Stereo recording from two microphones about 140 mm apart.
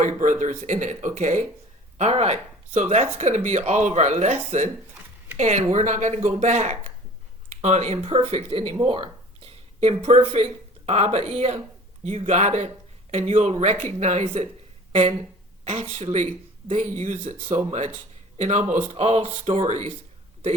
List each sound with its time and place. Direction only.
0.0 s speech: 60° right (ahead or behind)
5.4 s speech: 55° right (ahead or behind)
15.6 s speech: 55° right (ahead or behind)
19.5 s speech: 60° right (ahead or behind)